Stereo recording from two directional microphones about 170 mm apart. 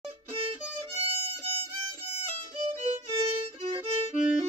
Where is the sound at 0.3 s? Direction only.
35° right (ahead or behind).